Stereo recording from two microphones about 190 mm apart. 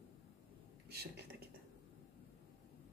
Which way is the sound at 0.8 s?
60° right (ahead or behind).